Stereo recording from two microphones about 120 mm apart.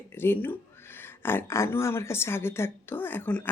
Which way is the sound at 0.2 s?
20° left (ahead or behind).